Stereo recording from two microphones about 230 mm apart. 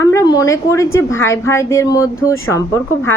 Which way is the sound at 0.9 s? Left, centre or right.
Centre.